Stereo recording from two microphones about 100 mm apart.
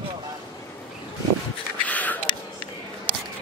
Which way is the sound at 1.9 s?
15° left (ahead or behind).